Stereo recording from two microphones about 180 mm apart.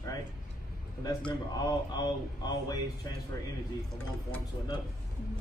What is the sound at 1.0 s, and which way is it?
Speech, 25° left (ahead or behind).